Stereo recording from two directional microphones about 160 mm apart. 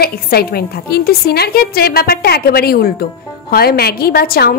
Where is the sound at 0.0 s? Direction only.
75° left (ahead or behind).